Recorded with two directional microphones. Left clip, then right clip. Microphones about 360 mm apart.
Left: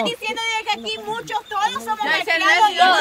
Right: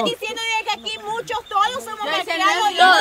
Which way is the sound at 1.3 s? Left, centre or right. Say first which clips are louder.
Right 2 dB; centre.